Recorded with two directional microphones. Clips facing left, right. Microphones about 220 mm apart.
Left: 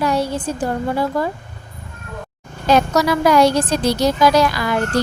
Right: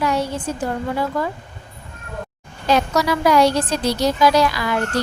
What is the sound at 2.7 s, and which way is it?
A woman's voice, 45° left (ahead or behind).